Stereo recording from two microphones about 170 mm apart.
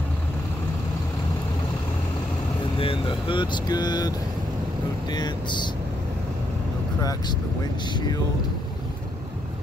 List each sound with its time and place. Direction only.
2.8 s speech: 30° left (ahead or behind)
5.1 s speech: 25° left (ahead or behind)
7.0 s speech: 20° left (ahead or behind)